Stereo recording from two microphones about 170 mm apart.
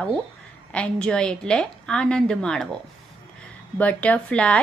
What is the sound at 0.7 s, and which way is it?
A woman's voice, 5° left (ahead or behind).